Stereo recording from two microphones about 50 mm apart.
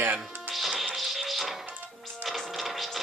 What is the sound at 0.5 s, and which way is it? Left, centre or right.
Music, centre.